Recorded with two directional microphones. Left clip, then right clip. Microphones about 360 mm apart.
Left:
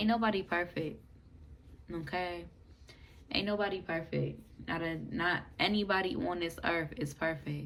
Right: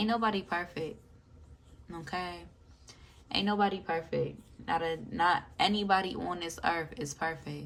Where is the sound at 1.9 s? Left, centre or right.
Centre.